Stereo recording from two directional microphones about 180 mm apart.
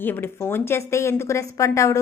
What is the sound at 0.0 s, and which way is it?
A woman's voice, 10° left (ahead or behind).